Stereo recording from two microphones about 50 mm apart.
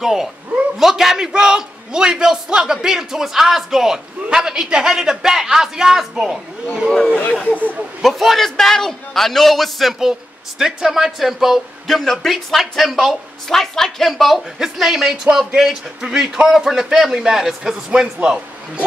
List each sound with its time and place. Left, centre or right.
0.0 s a man's voice: centre
7.4 s speech: right
8.0 s a man's voice: centre